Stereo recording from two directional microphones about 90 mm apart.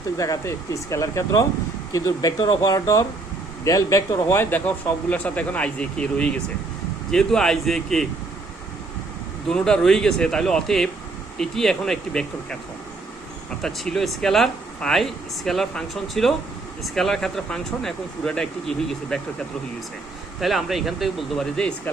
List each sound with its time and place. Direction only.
0.2 s speech: 35° left (ahead or behind)
4.4 s speech: 20° left (ahead or behind); by 8.0 s 5° left (ahead or behind)
9.5 s speech: 10° left (ahead or behind)
13.6 s speech: 5° left (ahead or behind)
20.4 s speech: centre (ahead or behind)